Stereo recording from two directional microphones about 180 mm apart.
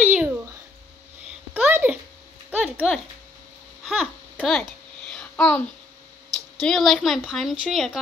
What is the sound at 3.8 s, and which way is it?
Babbling, centre (ahead or behind).